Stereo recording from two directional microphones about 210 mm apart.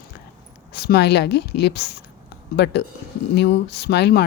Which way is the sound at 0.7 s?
50° left (ahead or behind).